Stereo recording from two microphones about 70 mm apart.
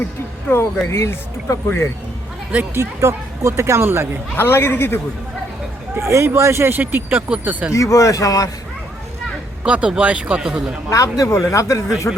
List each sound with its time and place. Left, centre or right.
0.9 s speech: left
2.7 s speech: right
4.4 s speech: left
5.9 s speech: right; by 7.7 s centre
7.7 s speech: left
9.6 s speech: centre
10.8 s speech: left